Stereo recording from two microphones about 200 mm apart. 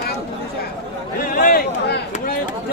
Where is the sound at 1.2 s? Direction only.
45° left (ahead or behind).